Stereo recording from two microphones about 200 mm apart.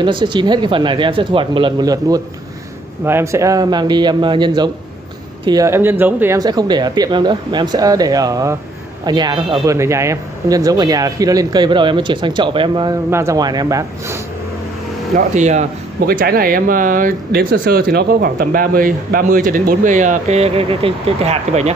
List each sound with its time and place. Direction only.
0.0 s speech: 25° right (ahead or behind)
15.1 s speech: 35° right (ahead or behind)